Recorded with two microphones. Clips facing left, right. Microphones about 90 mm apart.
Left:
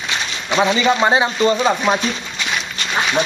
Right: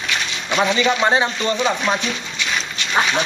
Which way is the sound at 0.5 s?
5° left (ahead or behind).